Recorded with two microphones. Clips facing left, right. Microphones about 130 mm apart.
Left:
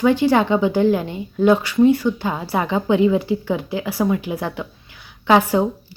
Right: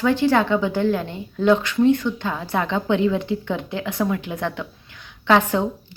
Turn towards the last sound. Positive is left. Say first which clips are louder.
# left 2 dB
turn(degrees=10)  # may be behind; listen again after turning